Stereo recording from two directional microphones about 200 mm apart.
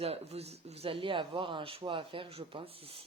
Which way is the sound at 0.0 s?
30° right (ahead or behind).